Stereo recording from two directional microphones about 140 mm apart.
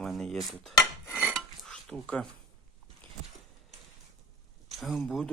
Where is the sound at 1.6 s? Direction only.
5° left (ahead or behind).